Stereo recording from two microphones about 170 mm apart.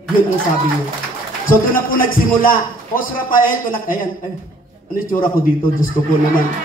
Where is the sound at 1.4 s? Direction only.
55° left (ahead or behind).